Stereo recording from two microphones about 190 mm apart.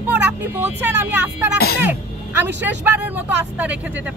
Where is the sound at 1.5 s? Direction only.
55° left (ahead or behind).